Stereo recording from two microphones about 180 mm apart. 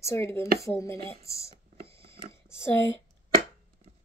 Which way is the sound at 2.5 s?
15° left (ahead or behind).